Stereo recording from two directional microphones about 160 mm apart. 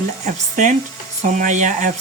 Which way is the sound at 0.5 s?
50° right (ahead or behind).